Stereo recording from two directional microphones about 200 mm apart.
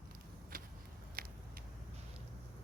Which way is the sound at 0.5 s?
45° right (ahead or behind).